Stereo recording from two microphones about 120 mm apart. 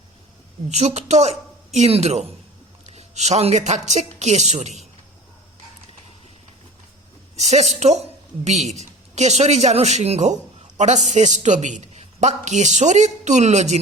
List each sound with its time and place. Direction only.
0.7 s a man's voice: 70° right (ahead or behind)
7.3 s a man's voice: 70° right (ahead or behind)